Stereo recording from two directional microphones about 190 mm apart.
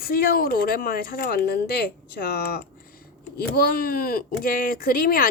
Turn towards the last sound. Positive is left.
turn(degrees=50)  # may be behind; listen again after turning